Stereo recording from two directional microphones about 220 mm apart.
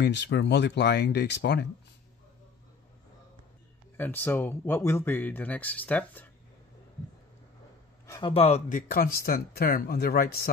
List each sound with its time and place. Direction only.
0.0 s speech: 50° left (ahead or behind)
3.9 s speech: 10° left (ahead or behind)
8.1 s speech: 25° left (ahead or behind); by 10.5 s 45° left (ahead or behind)